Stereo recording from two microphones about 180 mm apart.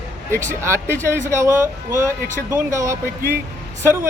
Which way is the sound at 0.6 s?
15° right (ahead or behind).